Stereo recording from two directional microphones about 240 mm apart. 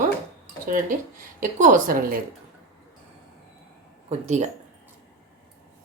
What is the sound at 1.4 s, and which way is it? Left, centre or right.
Speech, right.